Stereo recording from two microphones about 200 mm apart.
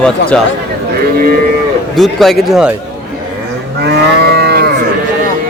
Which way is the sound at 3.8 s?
55° right (ahead or behind).